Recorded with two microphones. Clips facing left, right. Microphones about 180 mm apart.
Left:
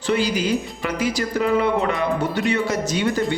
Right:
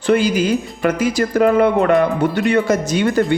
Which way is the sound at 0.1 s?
50° right (ahead or behind).